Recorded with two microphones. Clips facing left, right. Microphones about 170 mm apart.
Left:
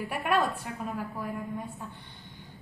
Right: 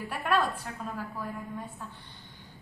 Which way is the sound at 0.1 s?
15° left (ahead or behind).